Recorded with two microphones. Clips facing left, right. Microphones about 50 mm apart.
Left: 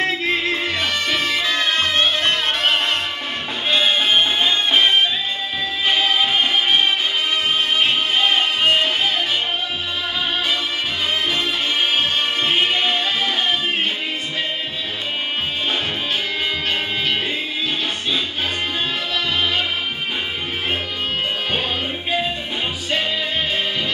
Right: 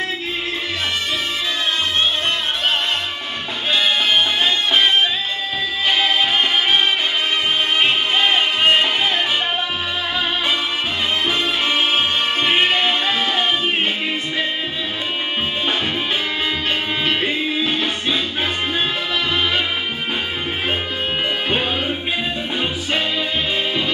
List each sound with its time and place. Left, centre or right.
0.0 s music: left
1.8 s music: left
3.7 s music: left
7.8 s music: centre
12.4 s music: right
17.0 s music: right